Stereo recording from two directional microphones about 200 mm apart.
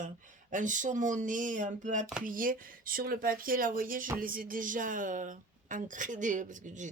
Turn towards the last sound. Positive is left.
turn(degrees=-40)  # may be behind; listen again after turning